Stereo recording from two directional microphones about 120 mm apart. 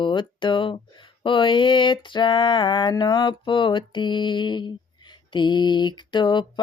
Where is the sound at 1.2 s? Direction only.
45° left (ahead or behind).